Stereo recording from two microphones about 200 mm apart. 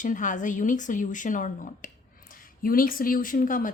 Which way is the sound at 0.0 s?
40° left (ahead or behind).